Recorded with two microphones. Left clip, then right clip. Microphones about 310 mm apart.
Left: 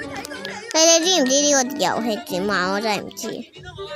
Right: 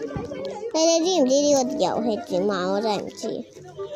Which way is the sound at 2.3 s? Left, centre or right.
Left.